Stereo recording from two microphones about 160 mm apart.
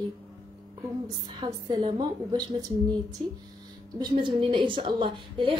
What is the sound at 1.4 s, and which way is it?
A woman's voice, 25° right (ahead or behind).